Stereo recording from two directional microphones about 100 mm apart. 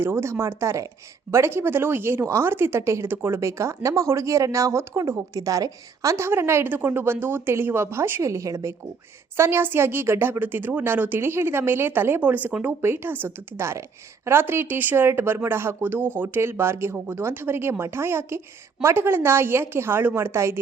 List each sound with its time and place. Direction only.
0.0 s speech: 25° right (ahead or behind)